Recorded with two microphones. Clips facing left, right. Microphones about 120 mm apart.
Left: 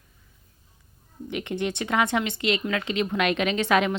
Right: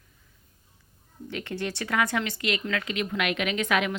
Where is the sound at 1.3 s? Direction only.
15° left (ahead or behind).